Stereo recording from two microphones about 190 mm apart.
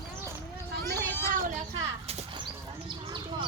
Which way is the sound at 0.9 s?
10° left (ahead or behind).